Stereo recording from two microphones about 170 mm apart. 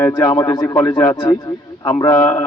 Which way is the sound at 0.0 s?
20° left (ahead or behind).